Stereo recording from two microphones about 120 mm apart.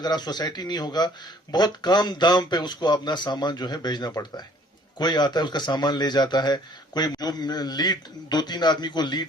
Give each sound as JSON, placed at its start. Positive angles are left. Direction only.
{"t": 0.0, "sound": "a man's voice", "side_deg": 35}